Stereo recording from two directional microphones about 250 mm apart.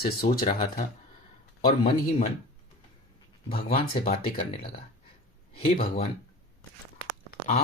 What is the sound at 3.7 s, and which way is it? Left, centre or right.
Speech, left.